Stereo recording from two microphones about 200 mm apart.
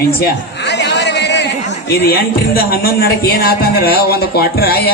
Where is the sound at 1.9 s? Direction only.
50° left (ahead or behind).